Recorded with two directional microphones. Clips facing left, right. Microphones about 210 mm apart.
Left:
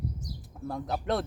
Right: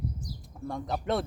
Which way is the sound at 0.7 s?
5° left (ahead or behind).